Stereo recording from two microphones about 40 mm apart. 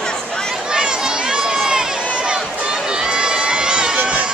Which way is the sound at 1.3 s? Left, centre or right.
Centre.